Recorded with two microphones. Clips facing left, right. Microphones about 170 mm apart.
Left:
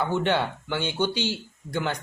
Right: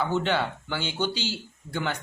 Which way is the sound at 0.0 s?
15° left (ahead or behind).